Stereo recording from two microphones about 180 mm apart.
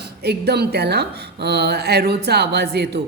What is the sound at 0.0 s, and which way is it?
A woman's voice, 65° right (ahead or behind).